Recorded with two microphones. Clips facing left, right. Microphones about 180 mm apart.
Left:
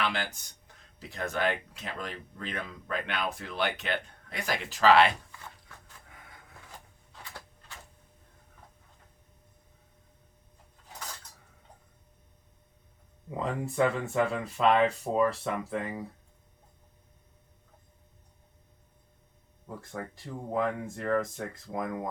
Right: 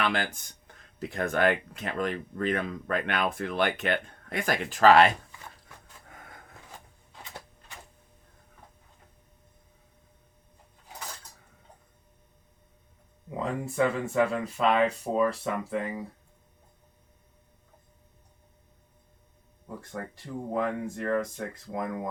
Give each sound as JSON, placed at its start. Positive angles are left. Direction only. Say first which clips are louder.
{"t": 0.0, "sound": "speech", "louder": "right 3 dB", "side_deg": -50}
{"t": 6.1, "sound": "a sound", "louder": "right 6 dB", "side_deg": -45}
{"t": 7.1, "sound": "printer", "louder": "right 2 dB", "side_deg": -20}
{"t": 13.4, "sound": "speech", "louder": "right 1 dB", "side_deg": 0}
{"t": 19.6, "sound": "speech", "louder": "right 1 dB", "side_deg": 0}